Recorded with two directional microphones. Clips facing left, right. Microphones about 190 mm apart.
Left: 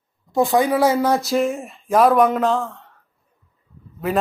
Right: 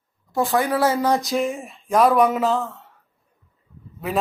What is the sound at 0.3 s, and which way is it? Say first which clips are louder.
A woman's voice: left 4 dB; 15° left (ahead or behind).